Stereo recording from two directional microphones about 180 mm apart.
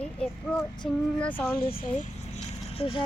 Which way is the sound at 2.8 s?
30° left (ahead or behind).